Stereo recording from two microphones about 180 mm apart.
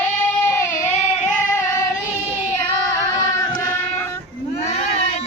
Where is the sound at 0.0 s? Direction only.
15° left (ahead or behind).